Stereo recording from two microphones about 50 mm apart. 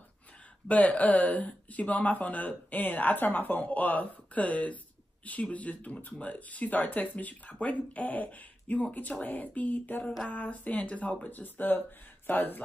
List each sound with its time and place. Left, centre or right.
0.7 s speech: left